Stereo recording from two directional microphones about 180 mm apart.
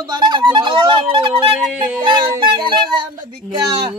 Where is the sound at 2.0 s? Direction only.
25° right (ahead or behind).